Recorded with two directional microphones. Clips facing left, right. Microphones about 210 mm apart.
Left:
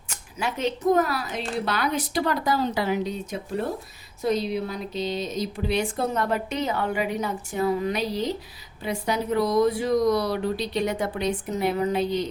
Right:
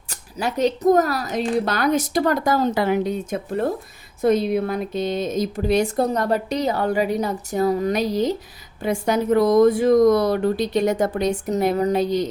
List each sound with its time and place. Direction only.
0.1 s speech: 40° right (ahead or behind)